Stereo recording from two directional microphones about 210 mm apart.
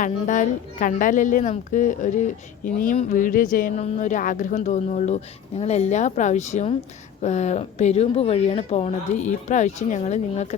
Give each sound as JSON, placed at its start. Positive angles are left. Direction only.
{"t": 0.0, "sound": "a woman's voice", "side_deg": 35}